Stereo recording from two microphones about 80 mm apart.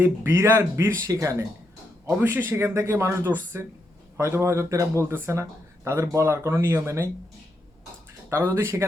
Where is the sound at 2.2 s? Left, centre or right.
Right.